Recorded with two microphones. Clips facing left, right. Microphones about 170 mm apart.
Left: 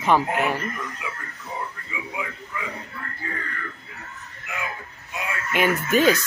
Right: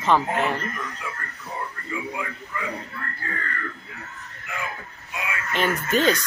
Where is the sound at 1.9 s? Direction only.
5° left (ahead or behind).